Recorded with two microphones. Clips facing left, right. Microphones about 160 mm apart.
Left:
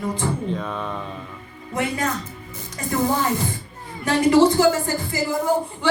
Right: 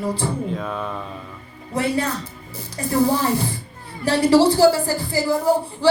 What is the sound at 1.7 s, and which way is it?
Speech, 30° right (ahead or behind).